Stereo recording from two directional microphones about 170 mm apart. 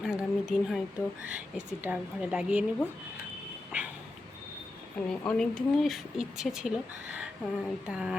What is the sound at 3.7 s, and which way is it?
Speech, 10° right (ahead or behind).